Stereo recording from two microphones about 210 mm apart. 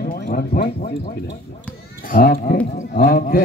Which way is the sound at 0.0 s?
45° left (ahead or behind).